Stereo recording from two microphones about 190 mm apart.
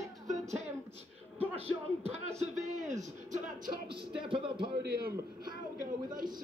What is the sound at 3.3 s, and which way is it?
Music, 45° right (ahead or behind).